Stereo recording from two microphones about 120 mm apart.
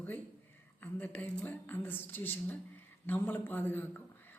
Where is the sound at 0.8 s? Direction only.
15° left (ahead or behind).